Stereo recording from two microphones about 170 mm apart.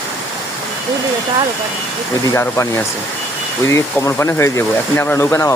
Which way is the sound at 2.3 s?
15° left (ahead or behind).